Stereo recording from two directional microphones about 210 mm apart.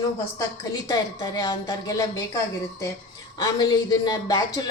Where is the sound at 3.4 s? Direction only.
20° left (ahead or behind).